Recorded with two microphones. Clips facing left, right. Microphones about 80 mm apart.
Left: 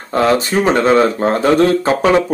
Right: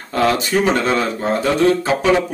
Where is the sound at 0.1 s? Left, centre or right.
Left.